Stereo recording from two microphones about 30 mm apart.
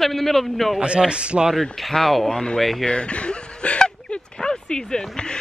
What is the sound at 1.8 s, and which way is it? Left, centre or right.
Speech, centre.